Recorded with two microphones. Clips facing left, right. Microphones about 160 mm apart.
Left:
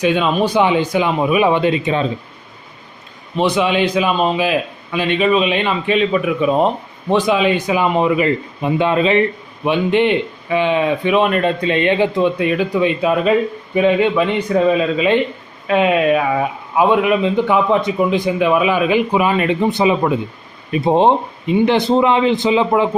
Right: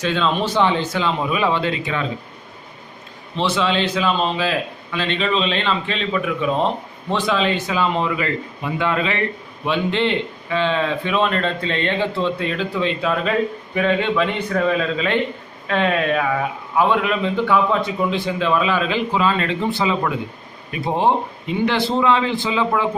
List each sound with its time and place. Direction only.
0.0 s speech: 15° left (ahead or behind)
3.3 s a man's voice: 15° left (ahead or behind)